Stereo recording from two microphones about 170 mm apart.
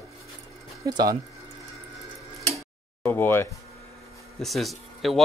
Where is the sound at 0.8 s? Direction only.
25° right (ahead or behind).